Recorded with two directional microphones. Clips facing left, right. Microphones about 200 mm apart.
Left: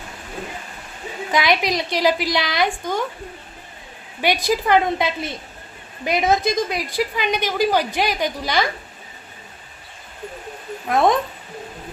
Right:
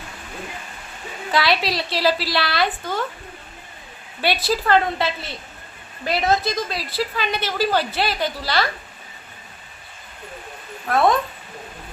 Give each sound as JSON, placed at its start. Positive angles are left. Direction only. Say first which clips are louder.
{"t": 1.3, "sound": "a woman's voice", "louder": "left 1 dB", "side_deg": 15}
{"t": 4.2, "sound": "a woman's voice", "louder": "left 2 dB", "side_deg": 15}
{"t": 10.8, "sound": "a woman's voice", "louder": "left 1 dB", "side_deg": 20}